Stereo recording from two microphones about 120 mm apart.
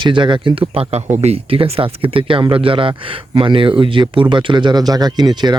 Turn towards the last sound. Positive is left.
turn(degrees=-35)  # may be behind; listen again after turning